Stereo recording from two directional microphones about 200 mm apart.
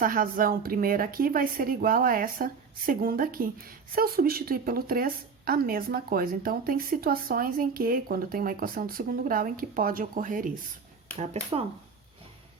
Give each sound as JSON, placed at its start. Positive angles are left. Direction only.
{"t": 0.0, "sound": "a woman's voice", "side_deg": -45}